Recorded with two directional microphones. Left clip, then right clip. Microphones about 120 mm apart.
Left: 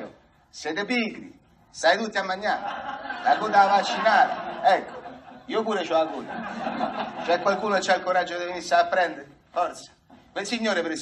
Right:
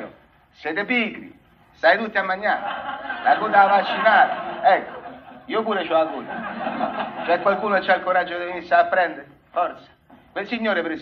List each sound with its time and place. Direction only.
0.6 s speech: 30° left (ahead or behind)